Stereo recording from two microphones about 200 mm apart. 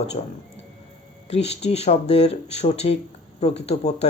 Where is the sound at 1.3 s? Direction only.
30° left (ahead or behind).